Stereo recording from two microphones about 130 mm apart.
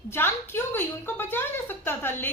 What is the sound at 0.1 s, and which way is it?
A woman's voice, 15° left (ahead or behind).